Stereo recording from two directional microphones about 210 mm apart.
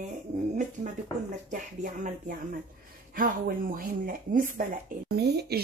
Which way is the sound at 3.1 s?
40° right (ahead or behind).